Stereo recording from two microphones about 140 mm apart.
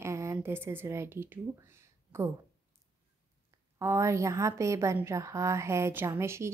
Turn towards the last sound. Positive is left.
turn(degrees=-20)  # may be behind; listen again after turning